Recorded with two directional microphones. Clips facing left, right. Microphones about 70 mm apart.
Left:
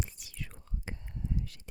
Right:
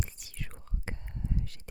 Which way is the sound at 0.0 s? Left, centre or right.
Right.